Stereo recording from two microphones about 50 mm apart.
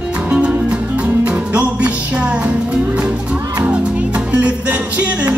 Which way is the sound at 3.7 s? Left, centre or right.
Right.